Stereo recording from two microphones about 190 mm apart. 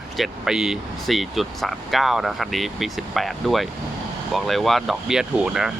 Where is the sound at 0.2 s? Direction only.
5° right (ahead or behind).